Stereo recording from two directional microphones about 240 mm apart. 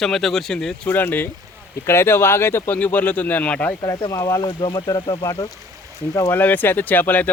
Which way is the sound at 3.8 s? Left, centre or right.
Centre.